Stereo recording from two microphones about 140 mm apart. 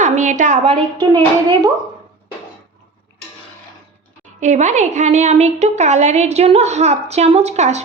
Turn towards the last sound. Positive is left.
turn(degrees=-55)  # may be behind; listen again after turning